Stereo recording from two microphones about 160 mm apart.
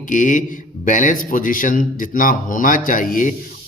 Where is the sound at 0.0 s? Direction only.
55° left (ahead or behind).